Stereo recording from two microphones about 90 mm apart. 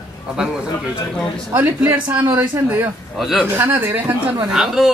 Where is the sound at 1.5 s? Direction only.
20° right (ahead or behind).